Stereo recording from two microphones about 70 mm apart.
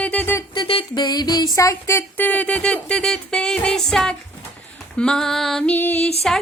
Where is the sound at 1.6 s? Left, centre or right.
Left.